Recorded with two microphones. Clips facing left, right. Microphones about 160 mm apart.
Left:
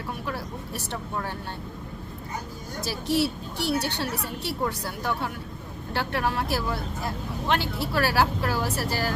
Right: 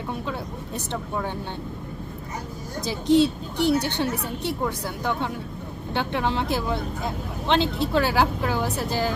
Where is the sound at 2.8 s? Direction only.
20° right (ahead or behind).